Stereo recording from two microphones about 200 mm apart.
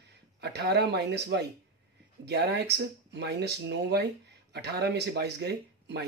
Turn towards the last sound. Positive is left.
turn(degrees=-55)  # may be behind; listen again after turning